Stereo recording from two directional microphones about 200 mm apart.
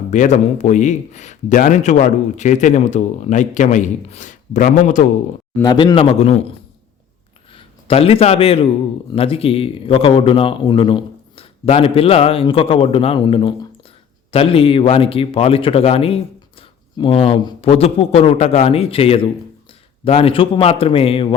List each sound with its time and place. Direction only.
0.1 s a man's voice: 35° left (ahead or behind)
5.6 s speech: 25° left (ahead or behind)
7.5 s a man's voice: 30° left (ahead or behind)